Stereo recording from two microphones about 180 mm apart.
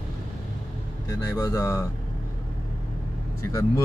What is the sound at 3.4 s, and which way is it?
Speech, 15° left (ahead or behind).